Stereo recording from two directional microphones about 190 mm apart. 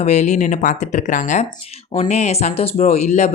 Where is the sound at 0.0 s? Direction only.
35° left (ahead or behind).